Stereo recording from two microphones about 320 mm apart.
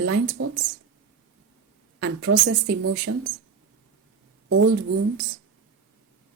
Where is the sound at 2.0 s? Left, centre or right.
Right.